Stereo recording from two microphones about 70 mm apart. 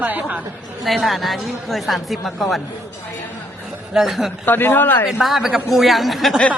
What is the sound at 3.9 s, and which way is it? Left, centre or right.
Speech, centre.